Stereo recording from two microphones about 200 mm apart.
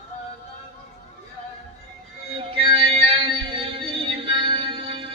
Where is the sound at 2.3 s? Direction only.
25° right (ahead or behind).